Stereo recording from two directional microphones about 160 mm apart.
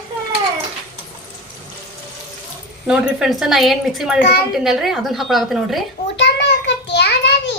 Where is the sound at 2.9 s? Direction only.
5° right (ahead or behind).